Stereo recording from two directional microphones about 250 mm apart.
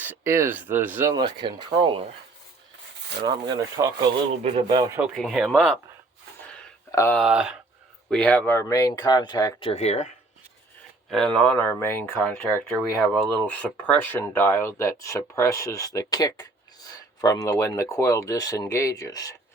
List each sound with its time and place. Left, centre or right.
0.3 s speech: centre
3.2 s speech: centre
4.9 s speech: centre
6.5 s a sound: centre
7.2 s speech: centre; by 10.1 s left
11.1 s speech: centre